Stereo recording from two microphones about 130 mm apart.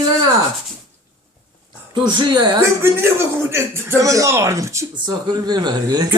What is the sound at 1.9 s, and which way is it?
Speech, 35° right (ahead or behind).